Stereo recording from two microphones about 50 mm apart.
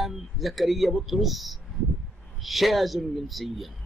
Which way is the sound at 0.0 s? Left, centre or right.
Centre.